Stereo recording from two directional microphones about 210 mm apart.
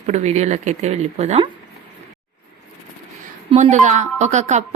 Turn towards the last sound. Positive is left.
turn(degrees=-35)  # may be behind; listen again after turning